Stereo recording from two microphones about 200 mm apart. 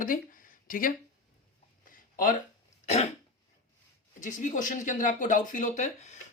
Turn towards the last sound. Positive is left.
turn(degrees=35)  # may be behind; listen again after turning